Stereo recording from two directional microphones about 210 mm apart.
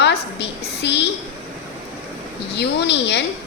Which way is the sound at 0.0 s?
55° left (ahead or behind).